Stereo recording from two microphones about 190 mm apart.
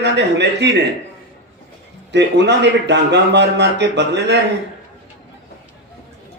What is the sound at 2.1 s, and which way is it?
Speech, 65° right (ahead or behind).